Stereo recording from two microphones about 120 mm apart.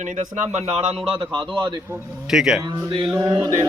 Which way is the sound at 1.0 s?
45° right (ahead or behind).